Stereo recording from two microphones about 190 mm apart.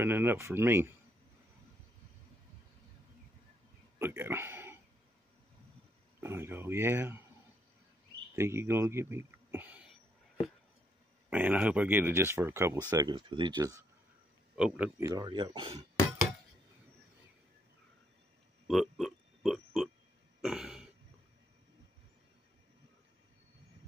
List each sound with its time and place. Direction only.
0.0 s speech: 10° right (ahead or behind)
4.0 s a sound: 10° right (ahead or behind)
6.2 s speech: 10° right (ahead or behind)
8.4 s speech: 15° right (ahead or behind)
11.2 s speech: 10° right (ahead or behind)
14.5 s speech: 5° right (ahead or behind); by 15.8 s 25° right (ahead or behind)
18.7 s a sound: centre (ahead or behind)
20.4 s cough: 5° right (ahead or behind)